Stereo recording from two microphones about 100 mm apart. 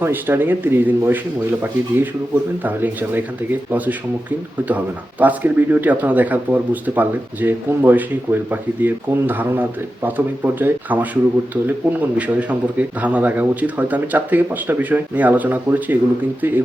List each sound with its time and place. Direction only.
0.0 s speech: 20° right (ahead or behind)
5.2 s speech: 15° right (ahead or behind)